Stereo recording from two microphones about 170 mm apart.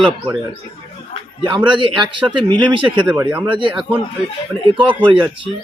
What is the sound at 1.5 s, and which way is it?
Speech, 25° right (ahead or behind).